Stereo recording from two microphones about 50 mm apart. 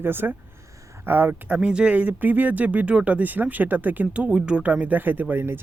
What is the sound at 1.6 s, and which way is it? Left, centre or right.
Speech, centre.